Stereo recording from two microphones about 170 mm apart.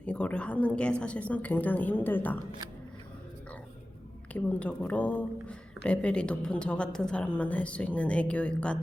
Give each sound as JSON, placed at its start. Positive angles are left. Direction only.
{"t": 0.0, "sound": "a woman's voice", "side_deg": 10}
{"t": 4.3, "sound": "a woman's voice", "side_deg": 10}